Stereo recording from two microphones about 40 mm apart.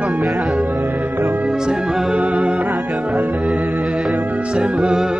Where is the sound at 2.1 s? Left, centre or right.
Right.